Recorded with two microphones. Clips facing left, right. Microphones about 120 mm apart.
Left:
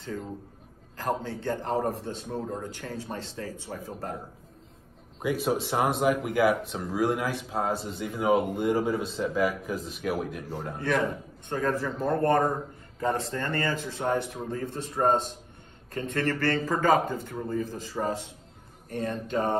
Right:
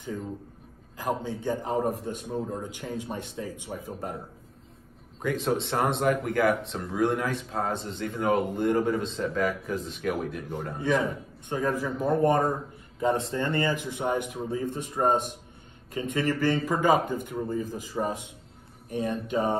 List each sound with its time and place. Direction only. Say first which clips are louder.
0.9 s speech: even; 15° right (ahead or behind)
5.2 s speech: even; 10° left (ahead or behind)
10.8 s speech: right 1 dB; 15° right (ahead or behind)